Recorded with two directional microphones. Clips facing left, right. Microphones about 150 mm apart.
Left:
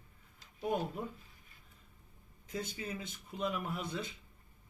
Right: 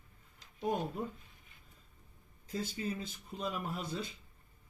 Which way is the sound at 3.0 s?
30° right (ahead or behind).